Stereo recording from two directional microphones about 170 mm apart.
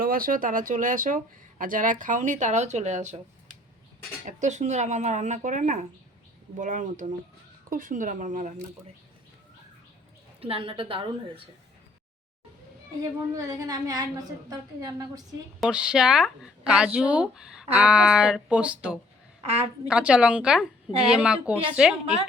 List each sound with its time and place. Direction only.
0.0 s speech: 60° right (ahead or behind)
4.3 s speech: 45° right (ahead or behind)
10.4 s a woman's voice: 35° right (ahead or behind)
13.0 s a woman's voice: 20° right (ahead or behind)
15.6 s speech: 5° right (ahead or behind)
19.5 s a woman's voice: 35° right (ahead or behind)
19.9 s a woman's voice: 5° right (ahead or behind)